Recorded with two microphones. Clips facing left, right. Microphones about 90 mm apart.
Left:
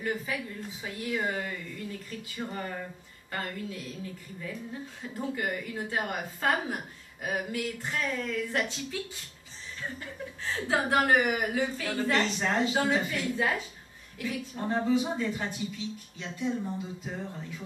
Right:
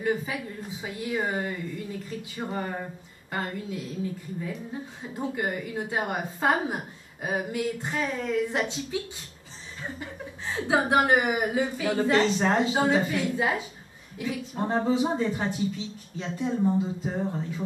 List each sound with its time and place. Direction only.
0.0 s a woman's voice: 20° right (ahead or behind)
5.0 s a woman's voice: 20° right (ahead or behind)